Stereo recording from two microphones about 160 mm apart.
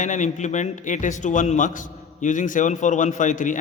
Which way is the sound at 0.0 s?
50° left (ahead or behind).